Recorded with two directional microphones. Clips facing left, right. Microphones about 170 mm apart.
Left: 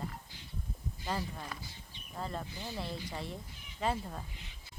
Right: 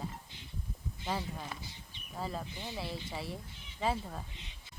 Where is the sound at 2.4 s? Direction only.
20° right (ahead or behind).